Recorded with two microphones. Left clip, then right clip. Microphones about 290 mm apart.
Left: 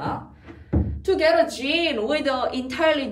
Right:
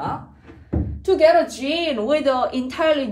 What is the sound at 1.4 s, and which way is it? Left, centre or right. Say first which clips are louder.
A woman's voice: even; centre.